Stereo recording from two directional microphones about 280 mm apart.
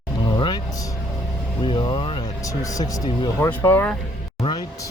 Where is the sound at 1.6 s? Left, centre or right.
Centre.